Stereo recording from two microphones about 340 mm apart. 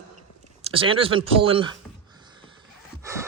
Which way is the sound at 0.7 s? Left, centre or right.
Centre.